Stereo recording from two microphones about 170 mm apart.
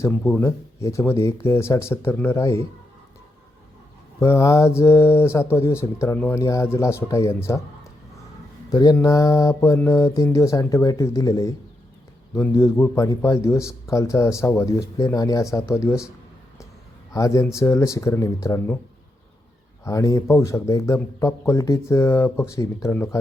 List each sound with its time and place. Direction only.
0.0 s a man's voice: 10° left (ahead or behind)
4.2 s a man's voice: 15° left (ahead or behind)
8.7 s mantra: 20° left (ahead or behind)
12.3 s a man's voice: 15° left (ahead or behind)
17.1 s a man's voice: 20° left (ahead or behind)
19.8 s a man's voice: 20° left (ahead or behind)